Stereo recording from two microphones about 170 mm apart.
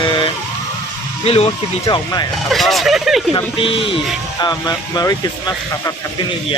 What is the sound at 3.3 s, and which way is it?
Speech, 30° left (ahead or behind).